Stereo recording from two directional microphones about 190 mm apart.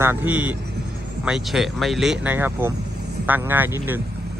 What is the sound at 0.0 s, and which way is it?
Speech, 10° right (ahead or behind).